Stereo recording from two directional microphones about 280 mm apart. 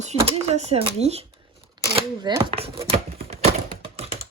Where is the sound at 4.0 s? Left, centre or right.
Right.